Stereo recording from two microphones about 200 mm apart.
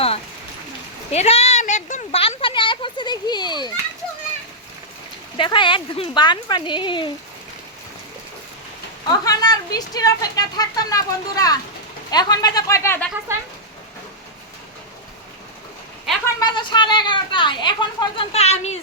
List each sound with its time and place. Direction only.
1.1 s a sound: 30° left (ahead or behind)
5.4 s a child's voice: 25° left (ahead or behind)
9.0 s a child's voice: 20° left (ahead or behind)
16.2 s a child's voice: 20° left (ahead or behind)